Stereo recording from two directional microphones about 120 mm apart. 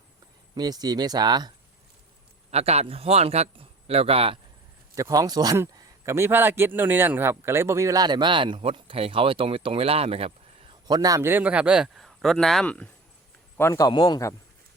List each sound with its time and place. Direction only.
0.5 s speech: 35° right (ahead or behind)
2.5 s a man's voice: 60° right (ahead or behind)
4.9 s speech: 30° right (ahead or behind)
5.7 s speech: 20° right (ahead or behind); by 10.8 s 55° right (ahead or behind)
10.8 s a man's voice: 30° right (ahead or behind); by 12.9 s 10° left (ahead or behind)
13.6 s a man's voice: 20° left (ahead or behind)
13.8 s a man's voice: 35° left (ahead or behind)